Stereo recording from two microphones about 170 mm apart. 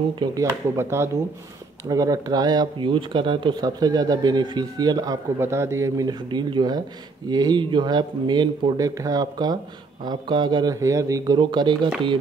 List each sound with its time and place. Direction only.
0.1 s speech: 25° right (ahead or behind)